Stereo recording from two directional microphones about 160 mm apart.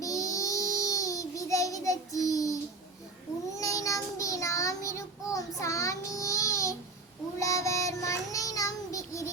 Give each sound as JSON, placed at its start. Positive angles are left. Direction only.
{"t": 0.0, "sound": "child singing", "side_deg": 20}
{"t": 3.6, "sound": "child singing", "side_deg": 20}